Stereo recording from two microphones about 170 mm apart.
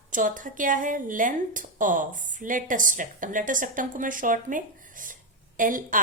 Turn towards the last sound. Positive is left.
turn(degrees=-50)  # may be behind; listen again after turning